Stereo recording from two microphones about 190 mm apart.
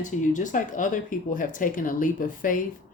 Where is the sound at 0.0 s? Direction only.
40° left (ahead or behind).